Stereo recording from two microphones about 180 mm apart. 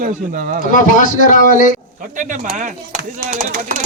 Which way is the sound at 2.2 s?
45° right (ahead or behind).